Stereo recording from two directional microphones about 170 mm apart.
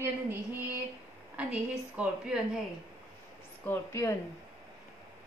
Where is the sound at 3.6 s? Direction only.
15° left (ahead or behind).